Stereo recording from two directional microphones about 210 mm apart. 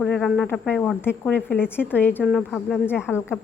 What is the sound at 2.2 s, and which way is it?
A woman's voice, 5° right (ahead or behind).